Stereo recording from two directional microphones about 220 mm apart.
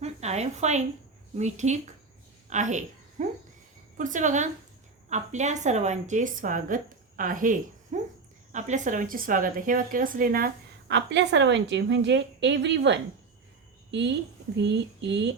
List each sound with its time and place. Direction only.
0.0 s a woman's voice: 30° right (ahead or behind); by 15.4 s 50° right (ahead or behind)